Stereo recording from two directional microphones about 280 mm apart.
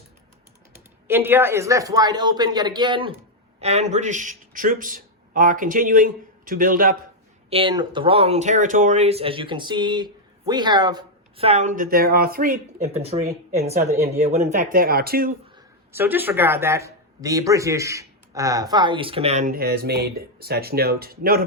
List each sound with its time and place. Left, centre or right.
1.0 s speech: centre; by 6.9 s right
7.5 s speech: centre; by 15.3 s right
15.5 s speech: centre; by 21.4 s right